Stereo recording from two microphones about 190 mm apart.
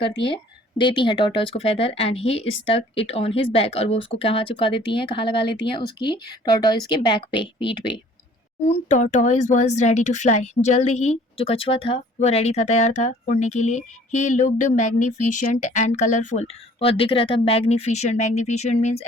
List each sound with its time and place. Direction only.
0.0 s speech: 25° left (ahead or behind)
8.6 s speech: 35° left (ahead or behind)